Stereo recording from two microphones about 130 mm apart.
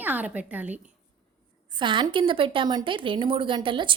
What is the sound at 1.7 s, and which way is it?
A woman's voice, 35° right (ahead or behind).